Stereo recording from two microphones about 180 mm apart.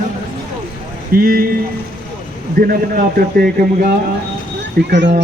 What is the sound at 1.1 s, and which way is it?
Speech, 55° right (ahead or behind).